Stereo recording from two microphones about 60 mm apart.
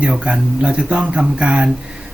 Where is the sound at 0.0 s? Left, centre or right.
Right.